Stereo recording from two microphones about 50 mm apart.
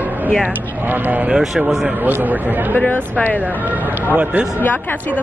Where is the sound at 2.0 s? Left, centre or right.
Right.